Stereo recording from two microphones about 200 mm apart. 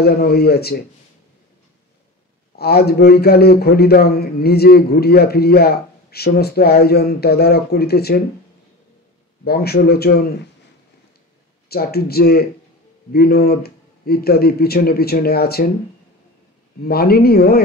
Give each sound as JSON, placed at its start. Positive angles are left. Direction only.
{"t": 0.0, "sound": "a man's voice", "side_deg": 50}
{"t": 2.5, "sound": "a man's voice", "side_deg": 50}
{"t": 9.4, "sound": "a man's voice", "side_deg": 50}
{"t": 11.7, "sound": "a man's voice", "side_deg": 50}
{"t": 16.8, "sound": "a man's voice", "side_deg": 50}